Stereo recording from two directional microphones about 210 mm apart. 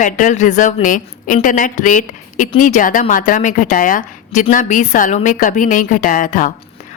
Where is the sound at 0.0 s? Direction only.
35° left (ahead or behind).